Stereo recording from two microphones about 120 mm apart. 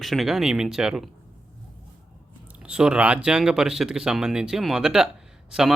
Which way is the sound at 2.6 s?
10° right (ahead or behind).